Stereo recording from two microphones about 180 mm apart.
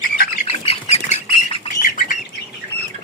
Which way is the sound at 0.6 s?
35° left (ahead or behind).